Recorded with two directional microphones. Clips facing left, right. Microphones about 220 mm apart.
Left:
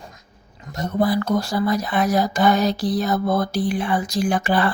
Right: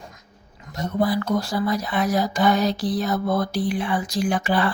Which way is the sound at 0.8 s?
45° left (ahead or behind).